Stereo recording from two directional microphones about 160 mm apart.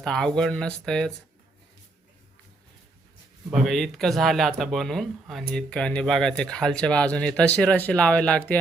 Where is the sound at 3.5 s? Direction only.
Centre (ahead or behind).